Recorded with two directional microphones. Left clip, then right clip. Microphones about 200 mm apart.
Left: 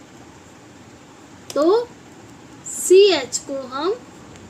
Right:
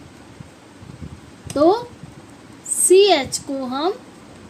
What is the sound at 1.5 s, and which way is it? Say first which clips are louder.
Speech: right 1 dB; 25° right (ahead or behind).